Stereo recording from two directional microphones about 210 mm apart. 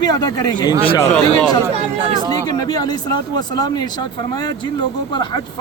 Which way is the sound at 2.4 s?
20° left (ahead or behind).